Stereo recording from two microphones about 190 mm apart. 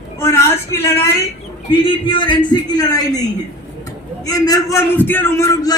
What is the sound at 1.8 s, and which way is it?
A man's voice, 25° left (ahead or behind).